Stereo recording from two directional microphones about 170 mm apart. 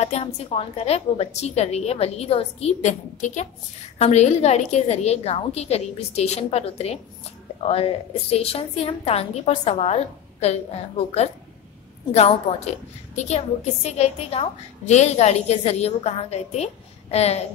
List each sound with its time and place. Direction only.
0.0 s a woman's voice: 40° left (ahead or behind)